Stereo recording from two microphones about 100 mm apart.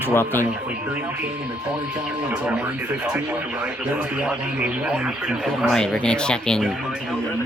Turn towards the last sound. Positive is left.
turn(degrees=5)  # may be behind; listen again after turning